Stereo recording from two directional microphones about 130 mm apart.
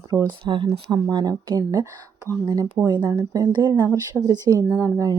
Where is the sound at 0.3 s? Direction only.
35° right (ahead or behind).